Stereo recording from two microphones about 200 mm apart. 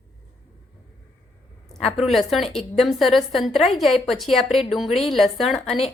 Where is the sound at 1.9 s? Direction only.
Centre (ahead or behind).